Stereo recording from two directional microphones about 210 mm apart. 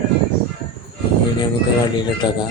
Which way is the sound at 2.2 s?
20° left (ahead or behind).